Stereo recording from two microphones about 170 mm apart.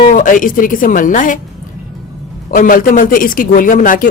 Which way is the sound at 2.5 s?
50° left (ahead or behind).